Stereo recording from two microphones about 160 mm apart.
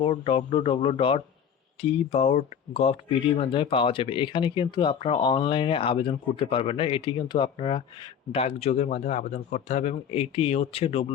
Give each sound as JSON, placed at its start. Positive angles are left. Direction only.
{"t": 0.0, "sound": "speech", "side_deg": 35}